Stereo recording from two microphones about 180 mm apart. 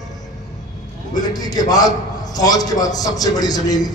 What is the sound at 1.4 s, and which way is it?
A man's voice, 20° left (ahead or behind).